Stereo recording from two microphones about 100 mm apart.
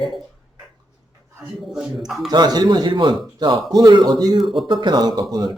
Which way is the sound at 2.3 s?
45° right (ahead or behind).